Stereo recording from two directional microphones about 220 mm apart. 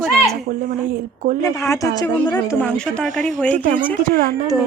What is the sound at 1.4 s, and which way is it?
Speech, 15° left (ahead or behind).